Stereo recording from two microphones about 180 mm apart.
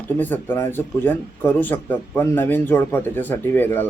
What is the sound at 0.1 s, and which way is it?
Speech, 10° left (ahead or behind).